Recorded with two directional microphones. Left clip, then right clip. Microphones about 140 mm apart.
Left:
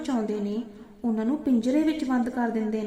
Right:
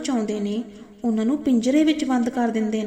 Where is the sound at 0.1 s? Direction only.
25° right (ahead or behind).